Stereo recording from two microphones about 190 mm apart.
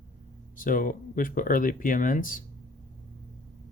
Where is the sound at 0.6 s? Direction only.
45° left (ahead or behind).